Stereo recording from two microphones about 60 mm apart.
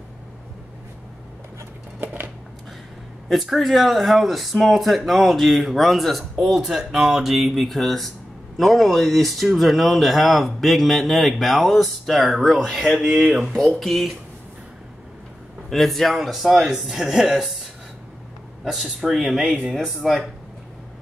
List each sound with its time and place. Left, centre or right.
2.0 s a sound: right
3.3 s speech: centre
15.7 s speech: centre
18.6 s speech: centre